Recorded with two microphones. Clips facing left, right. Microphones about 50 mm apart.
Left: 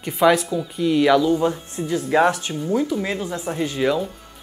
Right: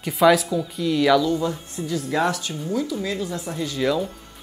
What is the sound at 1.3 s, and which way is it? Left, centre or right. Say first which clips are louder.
Speech: left 4 dB; left.